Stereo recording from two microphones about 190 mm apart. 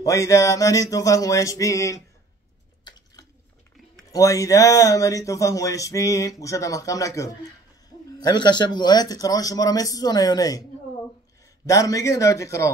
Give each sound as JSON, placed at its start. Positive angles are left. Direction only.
{"t": 0.0, "sound": "speech", "side_deg": 15}
{"t": 2.9, "sound": "a sound", "side_deg": 25}
{"t": 4.1, "sound": "speech", "side_deg": 15}
{"t": 11.6, "sound": "speech", "side_deg": 15}